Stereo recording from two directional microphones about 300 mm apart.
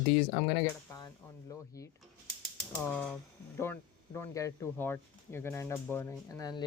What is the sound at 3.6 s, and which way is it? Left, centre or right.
Speech, centre.